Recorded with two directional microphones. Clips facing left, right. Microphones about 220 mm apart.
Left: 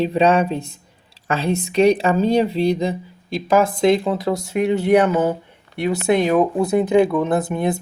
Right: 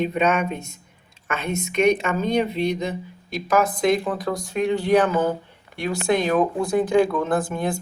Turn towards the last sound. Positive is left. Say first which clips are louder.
# left 3 dB
turn(degrees=20)  # may be behind; listen again after turning